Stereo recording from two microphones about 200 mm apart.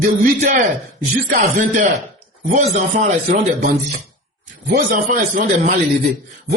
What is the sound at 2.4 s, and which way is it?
Speech, 40° right (ahead or behind).